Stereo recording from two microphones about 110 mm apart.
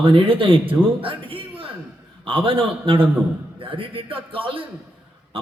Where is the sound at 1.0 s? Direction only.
55° right (ahead or behind).